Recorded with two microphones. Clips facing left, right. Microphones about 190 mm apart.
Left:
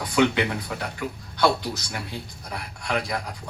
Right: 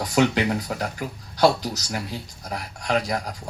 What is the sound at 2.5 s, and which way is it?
Speech, 40° right (ahead or behind).